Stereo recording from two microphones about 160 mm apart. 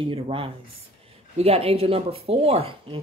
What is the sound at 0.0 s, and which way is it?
Speech, 35° right (ahead or behind).